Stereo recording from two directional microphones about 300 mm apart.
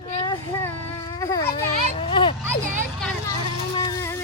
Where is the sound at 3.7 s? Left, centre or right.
Centre.